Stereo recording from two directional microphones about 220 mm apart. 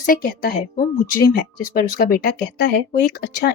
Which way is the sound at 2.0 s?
45° left (ahead or behind).